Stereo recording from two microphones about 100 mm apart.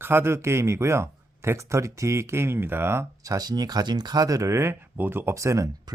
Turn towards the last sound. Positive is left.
turn(degrees=-30)  # may be behind; listen again after turning